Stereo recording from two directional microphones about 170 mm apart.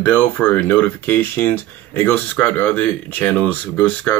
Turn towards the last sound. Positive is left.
turn(degrees=10)  # may be behind; listen again after turning